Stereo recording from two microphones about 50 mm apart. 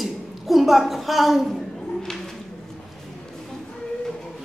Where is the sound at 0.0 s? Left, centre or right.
Centre.